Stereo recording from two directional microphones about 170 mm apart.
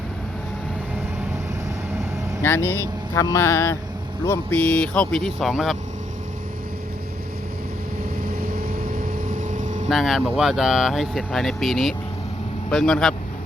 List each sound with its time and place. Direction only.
2.4 s speech: 15° left (ahead or behind)
8.4 s vehicle: 60° right (ahead or behind)
9.9 s speech: centre (ahead or behind)